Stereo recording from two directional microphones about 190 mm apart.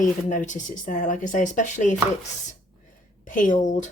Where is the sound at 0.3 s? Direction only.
40° left (ahead or behind).